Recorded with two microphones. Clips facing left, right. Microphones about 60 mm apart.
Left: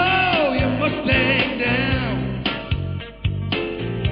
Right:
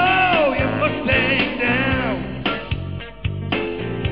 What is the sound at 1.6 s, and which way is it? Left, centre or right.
Music, centre.